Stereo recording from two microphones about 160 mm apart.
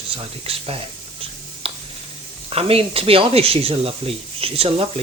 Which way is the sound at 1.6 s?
35° right (ahead or behind).